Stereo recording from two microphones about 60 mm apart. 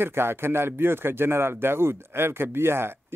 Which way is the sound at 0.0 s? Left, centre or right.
Right.